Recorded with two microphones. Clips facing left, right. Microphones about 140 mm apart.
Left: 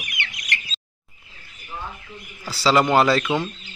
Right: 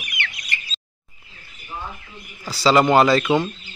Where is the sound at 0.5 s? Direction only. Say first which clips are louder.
Left 5 dB; 80° left.